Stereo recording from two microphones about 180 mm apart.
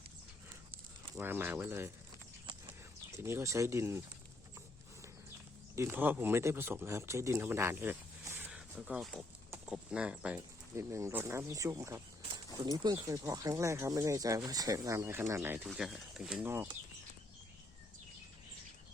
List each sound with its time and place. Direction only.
1.1 s speech: 10° right (ahead or behind)
2.5 s horse: 25° right (ahead or behind)
3.2 s speech: 15° right (ahead or behind)
5.7 s speech: 15° right (ahead or behind)